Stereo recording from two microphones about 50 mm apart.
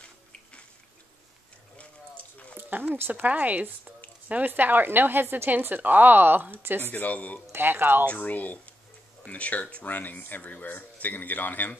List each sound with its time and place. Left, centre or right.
1.8 s a sound: left
2.5 s a sound: right
3.0 s a woman's voice: right
6.9 s speech: left
7.5 s speech: right
8.1 s speech: left